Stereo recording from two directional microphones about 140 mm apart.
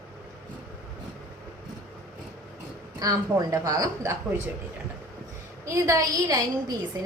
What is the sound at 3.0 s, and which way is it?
A woman's voice, 25° right (ahead or behind).